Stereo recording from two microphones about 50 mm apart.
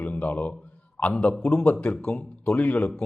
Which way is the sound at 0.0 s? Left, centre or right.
Left.